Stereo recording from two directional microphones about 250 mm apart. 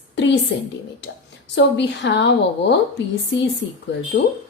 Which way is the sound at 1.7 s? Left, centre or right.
Left.